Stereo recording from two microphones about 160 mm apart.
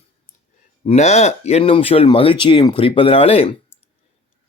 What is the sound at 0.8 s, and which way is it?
Speech, 45° left (ahead or behind).